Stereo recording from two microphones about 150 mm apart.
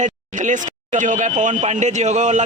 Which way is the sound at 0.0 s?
55° right (ahead or behind).